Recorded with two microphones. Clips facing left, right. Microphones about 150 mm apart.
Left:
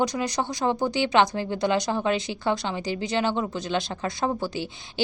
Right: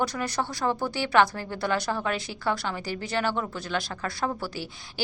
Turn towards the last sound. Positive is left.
turn(degrees=20)  # may be behind; listen again after turning